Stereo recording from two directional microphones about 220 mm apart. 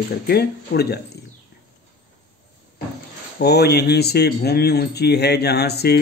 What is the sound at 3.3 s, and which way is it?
A man's voice, 45° left (ahead or behind).